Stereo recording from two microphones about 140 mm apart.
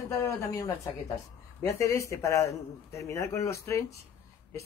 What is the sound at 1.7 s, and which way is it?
Speech, 20° left (ahead or behind).